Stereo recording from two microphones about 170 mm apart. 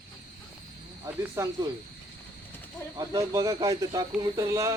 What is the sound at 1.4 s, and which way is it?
Speech, 15° right (ahead or behind).